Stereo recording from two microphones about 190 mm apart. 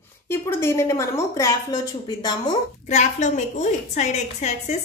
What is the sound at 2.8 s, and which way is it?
A woman's voice, 40° left (ahead or behind).